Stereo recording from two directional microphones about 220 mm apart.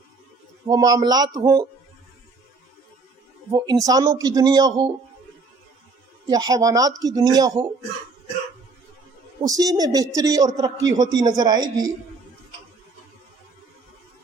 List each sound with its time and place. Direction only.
0.7 s a man's voice: 15° right (ahead or behind)
3.8 s a man's voice: 15° right (ahead or behind)
6.2 s a man's voice: 15° right (ahead or behind)
9.4 s a man's voice: 15° right (ahead or behind)